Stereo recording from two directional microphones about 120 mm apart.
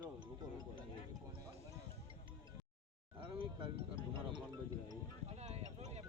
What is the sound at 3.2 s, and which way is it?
Music, 45° right (ahead or behind).